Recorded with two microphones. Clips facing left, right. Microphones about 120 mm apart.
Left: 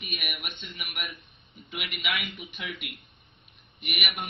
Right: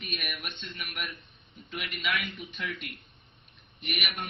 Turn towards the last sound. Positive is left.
turn(degrees=10)  # may be behind; listen again after turning